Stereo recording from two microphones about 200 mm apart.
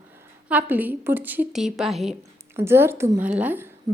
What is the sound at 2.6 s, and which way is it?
A woman's voice, 10° right (ahead or behind).